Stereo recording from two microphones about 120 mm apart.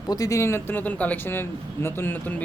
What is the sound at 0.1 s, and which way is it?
A man's voice, 30° left (ahead or behind).